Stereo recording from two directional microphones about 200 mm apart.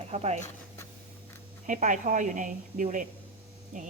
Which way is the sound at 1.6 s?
40° right (ahead or behind).